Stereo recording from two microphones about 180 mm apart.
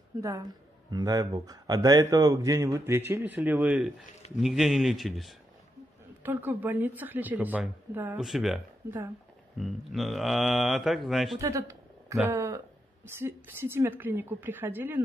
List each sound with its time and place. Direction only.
0.2 s a woman's voice: 20° right (ahead or behind); by 11.3 s centre (ahead or behind)
11.3 s a sound: 15° right (ahead or behind)
12.3 s a woman's voice: 15° right (ahead or behind)